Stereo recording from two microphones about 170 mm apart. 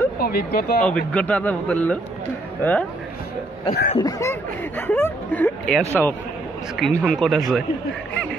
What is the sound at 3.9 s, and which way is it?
Speech, 20° left (ahead or behind).